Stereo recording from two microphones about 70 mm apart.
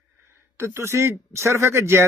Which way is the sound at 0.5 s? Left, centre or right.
Right.